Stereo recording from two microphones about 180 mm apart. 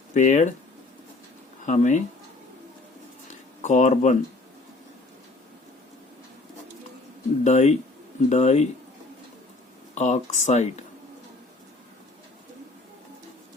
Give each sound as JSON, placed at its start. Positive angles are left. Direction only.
{"t": 0.1, "sound": "speech", "side_deg": 40}
{"t": 1.6, "sound": "speech", "side_deg": 40}
{"t": 3.6, "sound": "speech", "side_deg": 40}
{"t": 7.4, "sound": "speech", "side_deg": 40}
{"t": 9.9, "sound": "speech", "side_deg": 40}